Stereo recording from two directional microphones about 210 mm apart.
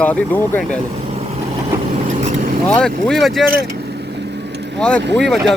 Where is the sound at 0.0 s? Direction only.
10° left (ahead or behind).